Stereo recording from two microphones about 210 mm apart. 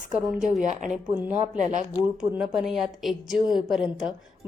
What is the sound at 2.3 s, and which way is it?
A woman's voice, 5° right (ahead or behind).